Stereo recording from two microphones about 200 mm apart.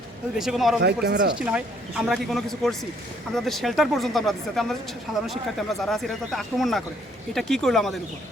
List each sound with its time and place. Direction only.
0.3 s speech: centre (ahead or behind)
1.0 s speech: 55° right (ahead or behind)
1.4 s speech: 5° right (ahead or behind)